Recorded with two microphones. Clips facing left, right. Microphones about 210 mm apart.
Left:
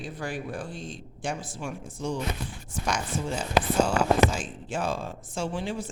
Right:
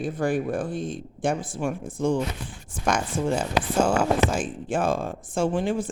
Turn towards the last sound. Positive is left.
turn(degrees=-50)  # may be behind; listen again after turning